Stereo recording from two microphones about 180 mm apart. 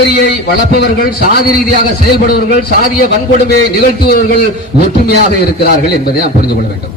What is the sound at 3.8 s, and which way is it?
Speech, 60° left (ahead or behind).